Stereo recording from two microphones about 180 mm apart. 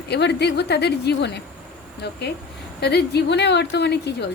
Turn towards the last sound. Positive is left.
turn(degrees=70)  # may be behind; listen again after turning